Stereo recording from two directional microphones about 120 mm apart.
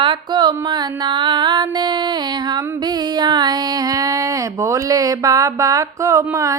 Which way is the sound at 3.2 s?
35° right (ahead or behind).